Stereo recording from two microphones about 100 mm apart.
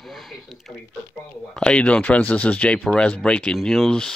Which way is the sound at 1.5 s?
10° left (ahead or behind).